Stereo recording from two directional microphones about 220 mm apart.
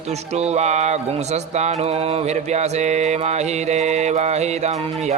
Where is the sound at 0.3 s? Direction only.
30° right (ahead or behind).